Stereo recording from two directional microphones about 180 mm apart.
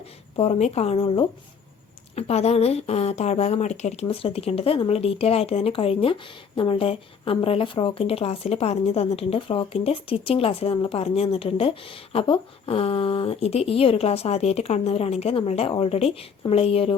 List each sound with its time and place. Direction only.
0.3 s a woman's voice: 35° left (ahead or behind)